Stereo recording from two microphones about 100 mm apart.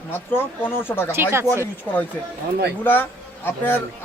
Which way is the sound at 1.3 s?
25° right (ahead or behind).